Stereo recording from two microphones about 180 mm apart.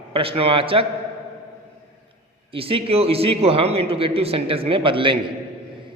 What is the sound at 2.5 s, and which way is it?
A man's voice, 30° right (ahead or behind).